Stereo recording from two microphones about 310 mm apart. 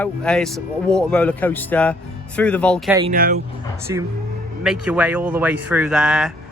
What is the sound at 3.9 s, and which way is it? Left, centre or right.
Speech, centre.